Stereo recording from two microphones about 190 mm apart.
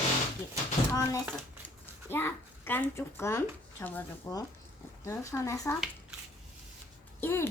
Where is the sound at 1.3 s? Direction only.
10° left (ahead or behind).